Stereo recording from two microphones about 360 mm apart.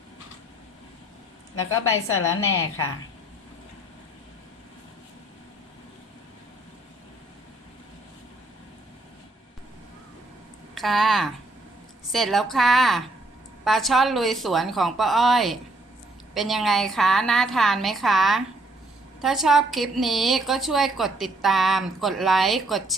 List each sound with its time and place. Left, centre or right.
2.1 s a woman's voice: left
10.8 s a woman's voice: centre